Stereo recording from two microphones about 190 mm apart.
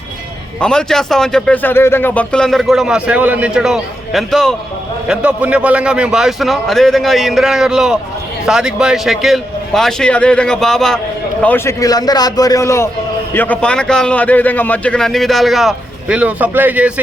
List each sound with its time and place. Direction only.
0.6 s a man's voice: 5° left (ahead or behind)
11.4 s a man's voice: 10° left (ahead or behind); by 16.9 s 10° right (ahead or behind)